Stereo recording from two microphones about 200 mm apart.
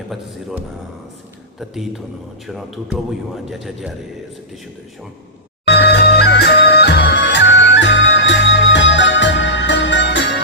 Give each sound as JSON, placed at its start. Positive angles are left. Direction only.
{"t": 1.5, "sound": "a man's voice", "side_deg": 0}
{"t": 5.6, "sound": "music", "side_deg": 55}